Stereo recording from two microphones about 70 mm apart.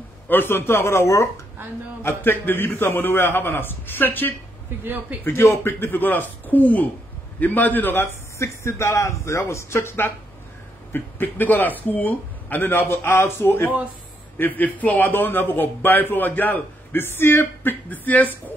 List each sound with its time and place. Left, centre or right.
0.3 s a man's voice: left
2.0 s a man's voice: left
8.4 s a man's voice: left
14.4 s a man's voice: left